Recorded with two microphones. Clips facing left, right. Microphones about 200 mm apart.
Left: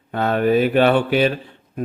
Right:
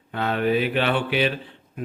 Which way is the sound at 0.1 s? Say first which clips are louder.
Left 5 dB; 45° left (ahead or behind).